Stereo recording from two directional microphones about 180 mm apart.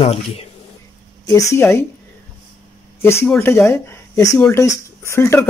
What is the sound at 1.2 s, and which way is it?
Speech, 15° left (ahead or behind).